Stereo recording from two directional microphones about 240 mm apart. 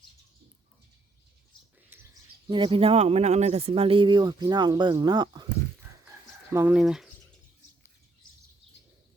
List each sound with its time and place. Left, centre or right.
2.5 s speech: right
5.9 s chicken: centre
6.5 s speech: centre